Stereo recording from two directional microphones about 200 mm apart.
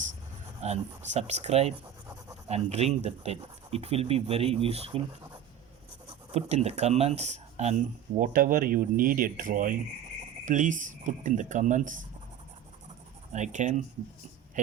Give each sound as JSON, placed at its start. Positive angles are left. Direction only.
{"t": 0.6, "sound": "speech", "side_deg": -35}
{"t": 6.3, "sound": "speech", "side_deg": -30}
{"t": 13.3, "sound": "speech", "side_deg": -35}